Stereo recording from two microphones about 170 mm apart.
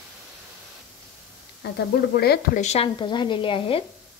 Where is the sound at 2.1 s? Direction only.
70° left (ahead or behind).